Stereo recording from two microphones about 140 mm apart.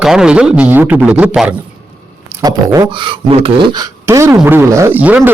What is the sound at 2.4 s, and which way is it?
Speech, 25° right (ahead or behind).